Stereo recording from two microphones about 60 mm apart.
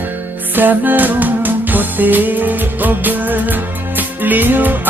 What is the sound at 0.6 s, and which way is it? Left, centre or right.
Music, right.